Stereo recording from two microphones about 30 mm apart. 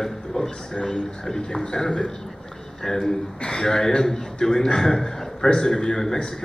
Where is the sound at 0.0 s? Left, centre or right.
Centre.